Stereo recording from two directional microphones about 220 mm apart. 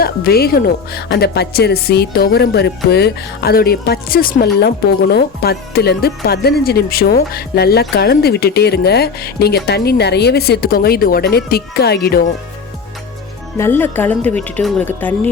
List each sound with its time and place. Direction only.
0.0 s speech: 45° left (ahead or behind)
13.6 s speech: 10° left (ahead or behind)